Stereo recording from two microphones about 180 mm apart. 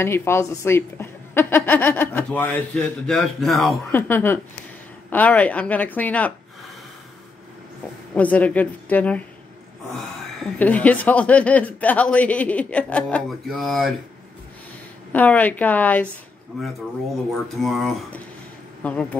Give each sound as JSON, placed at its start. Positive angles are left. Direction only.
{"t": 0.0, "sound": "a woman's voice", "side_deg": 15}
{"t": 3.9, "sound": "a woman's voice", "side_deg": 10}
{"t": 8.1, "sound": "a woman's voice", "side_deg": 10}
{"t": 10.6, "sound": "a woman's voice", "side_deg": 10}
{"t": 15.1, "sound": "a woman's voice", "side_deg": 10}
{"t": 17.6, "sound": "speech", "side_deg": 0}